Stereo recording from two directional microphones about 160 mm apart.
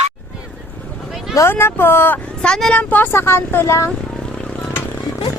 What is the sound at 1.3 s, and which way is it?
Speech, 15° left (ahead or behind).